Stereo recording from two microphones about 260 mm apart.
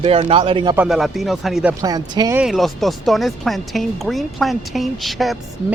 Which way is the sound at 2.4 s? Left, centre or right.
Centre.